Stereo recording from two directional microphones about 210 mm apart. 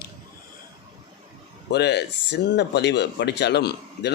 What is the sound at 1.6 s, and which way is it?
Speech, 50° left (ahead or behind).